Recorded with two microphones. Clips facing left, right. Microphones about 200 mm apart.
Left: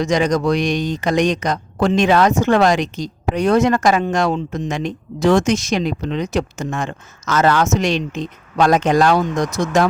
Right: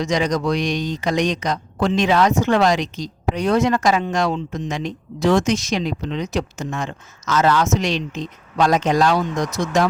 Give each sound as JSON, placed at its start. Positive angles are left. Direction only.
{"t": 0.0, "sound": "speech", "side_deg": 50}